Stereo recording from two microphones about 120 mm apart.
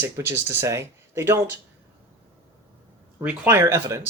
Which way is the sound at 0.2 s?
20° right (ahead or behind).